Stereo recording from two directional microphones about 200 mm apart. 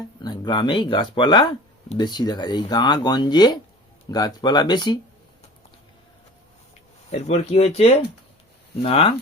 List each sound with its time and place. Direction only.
0.2 s speech: 20° left (ahead or behind)
7.1 s speech: 30° left (ahead or behind)